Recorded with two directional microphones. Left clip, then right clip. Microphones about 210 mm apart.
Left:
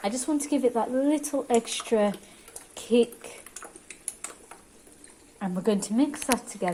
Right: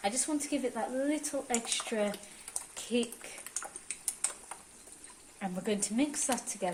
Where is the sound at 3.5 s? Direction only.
Centre (ahead or behind).